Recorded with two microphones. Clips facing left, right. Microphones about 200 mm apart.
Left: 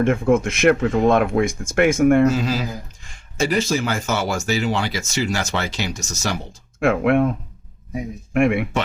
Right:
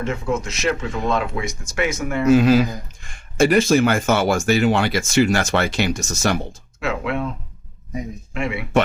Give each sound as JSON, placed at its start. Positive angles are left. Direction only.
{"t": 0.0, "sound": "speech", "side_deg": 55}
{"t": 2.3, "sound": "speech", "side_deg": -55}
{"t": 6.7, "sound": "speech", "side_deg": 55}
{"t": 8.3, "sound": "speech", "side_deg": 55}